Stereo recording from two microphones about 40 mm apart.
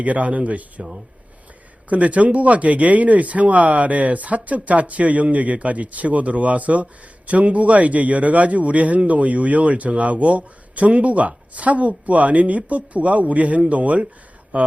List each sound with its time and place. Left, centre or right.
0.0 s speech: right
1.9 s speech: right